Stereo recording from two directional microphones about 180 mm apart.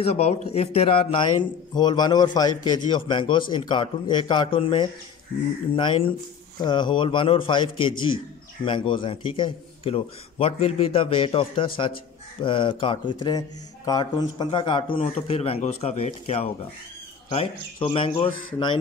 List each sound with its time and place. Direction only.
0.0 s a man's voice: 35° left (ahead or behind)